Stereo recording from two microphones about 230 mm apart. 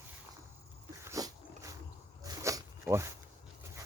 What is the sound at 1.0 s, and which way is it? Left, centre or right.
Dog, centre.